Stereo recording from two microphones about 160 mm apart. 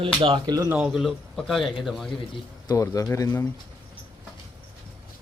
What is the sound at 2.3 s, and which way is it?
Speech, 20° left (ahead or behind).